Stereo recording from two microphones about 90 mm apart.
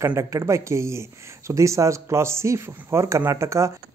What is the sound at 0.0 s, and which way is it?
Speech, 35° right (ahead or behind).